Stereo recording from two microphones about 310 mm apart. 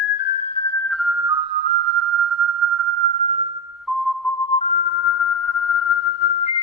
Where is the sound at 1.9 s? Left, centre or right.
Right.